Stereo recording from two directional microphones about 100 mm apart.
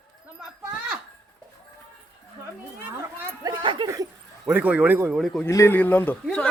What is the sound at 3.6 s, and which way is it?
Speech, 55° right (ahead or behind).